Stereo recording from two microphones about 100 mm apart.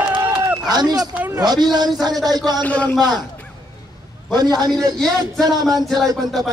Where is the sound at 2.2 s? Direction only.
40° right (ahead or behind).